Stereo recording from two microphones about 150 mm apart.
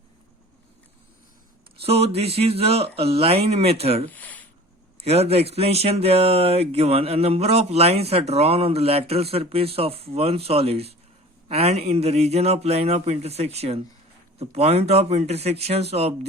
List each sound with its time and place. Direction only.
1.8 s speech: 40° right (ahead or behind)
4.1 s speech: 10° left (ahead or behind)
5.0 s speech: 45° right (ahead or behind)